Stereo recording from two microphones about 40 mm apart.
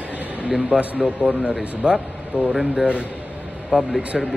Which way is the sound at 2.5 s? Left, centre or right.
Centre.